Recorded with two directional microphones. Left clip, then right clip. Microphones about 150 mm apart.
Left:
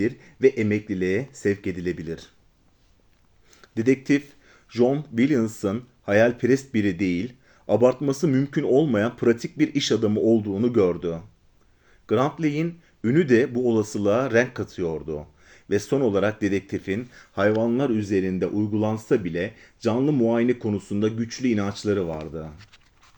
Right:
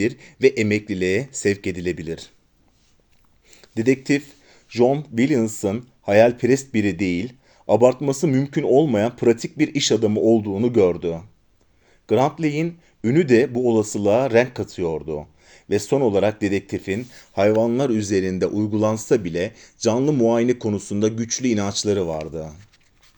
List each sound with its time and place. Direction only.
0.0 s speech: 30° right (ahead or behind)
3.5 s speech: 30° right (ahead or behind)